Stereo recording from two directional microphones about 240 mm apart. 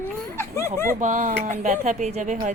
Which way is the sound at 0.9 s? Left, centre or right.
Right.